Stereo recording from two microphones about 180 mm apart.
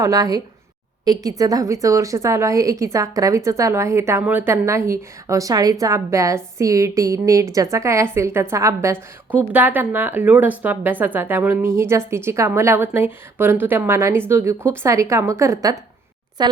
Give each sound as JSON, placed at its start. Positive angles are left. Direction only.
{"t": 0.0, "sound": "a woman's voice", "side_deg": -20}